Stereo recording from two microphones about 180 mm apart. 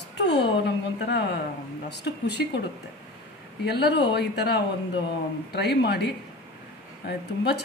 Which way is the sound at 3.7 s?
65° left (ahead or behind).